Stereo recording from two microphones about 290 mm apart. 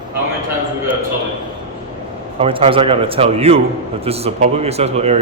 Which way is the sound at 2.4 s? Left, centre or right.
Centre.